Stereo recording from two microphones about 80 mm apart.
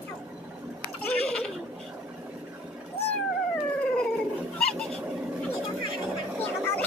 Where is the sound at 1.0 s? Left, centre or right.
Centre.